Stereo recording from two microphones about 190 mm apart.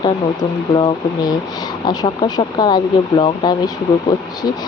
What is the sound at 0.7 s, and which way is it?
Speech, 25° left (ahead or behind).